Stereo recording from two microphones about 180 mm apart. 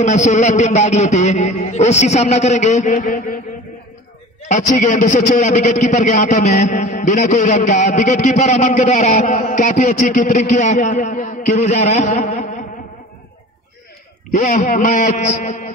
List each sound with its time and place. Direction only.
0.0 s a man's voice: 40° left (ahead or behind)
4.5 s a man's voice: 45° left (ahead or behind)
14.3 s a man's voice: 45° left (ahead or behind)